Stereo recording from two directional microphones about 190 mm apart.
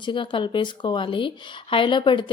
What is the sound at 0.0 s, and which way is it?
Speech, 25° left (ahead or behind).